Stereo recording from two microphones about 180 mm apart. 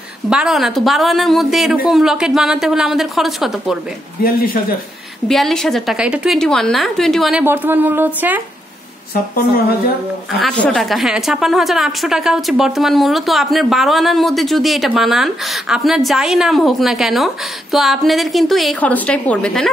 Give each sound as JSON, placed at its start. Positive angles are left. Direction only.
{"t": 0.3, "sound": "a woman's voice", "side_deg": -5}
{"t": 4.2, "sound": "speech", "side_deg": 55}
{"t": 5.3, "sound": "a woman's voice", "side_deg": 0}
{"t": 7.4, "sound": "speech", "side_deg": -10}
{"t": 10.4, "sound": "a woman's voice", "side_deg": 0}